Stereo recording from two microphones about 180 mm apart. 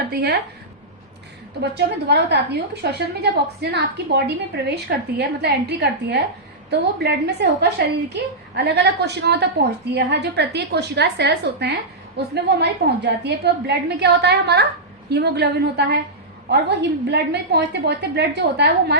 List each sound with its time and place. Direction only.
0.1 s speech: 65° right (ahead or behind)
1.7 s a woman's voice: 70° right (ahead or behind)